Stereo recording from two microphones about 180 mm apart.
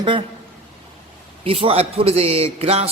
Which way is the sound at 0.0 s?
25° right (ahead or behind).